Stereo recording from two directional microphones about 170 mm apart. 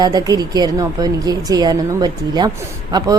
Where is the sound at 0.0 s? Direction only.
25° right (ahead or behind).